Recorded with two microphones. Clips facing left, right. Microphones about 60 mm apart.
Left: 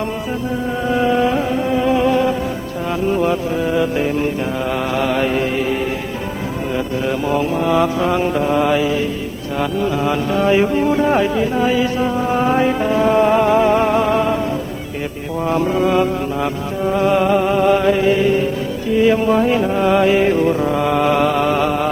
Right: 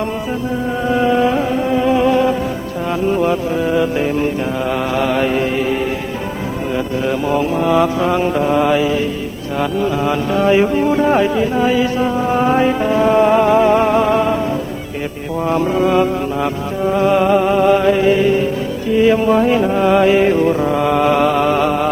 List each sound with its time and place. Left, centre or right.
0.9 s music: centre
4.9 s mantra: centre
7.3 s mantra: centre
9.6 s music: centre
15.4 s mantra: centre
16.9 s music: centre
17.7 s mantra: centre
19.0 s music: right